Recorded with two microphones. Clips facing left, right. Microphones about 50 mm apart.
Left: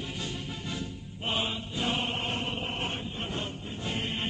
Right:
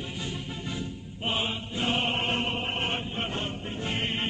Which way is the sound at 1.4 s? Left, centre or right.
Right.